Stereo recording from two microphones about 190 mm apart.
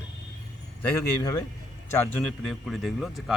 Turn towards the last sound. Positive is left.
turn(degrees=0)  # may be behind; listen again after turning